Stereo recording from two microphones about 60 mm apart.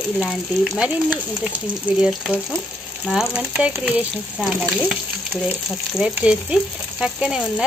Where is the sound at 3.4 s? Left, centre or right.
Centre.